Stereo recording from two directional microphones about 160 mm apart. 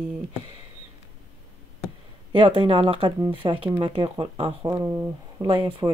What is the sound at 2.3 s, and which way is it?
A woman's voice, 35° right (ahead or behind).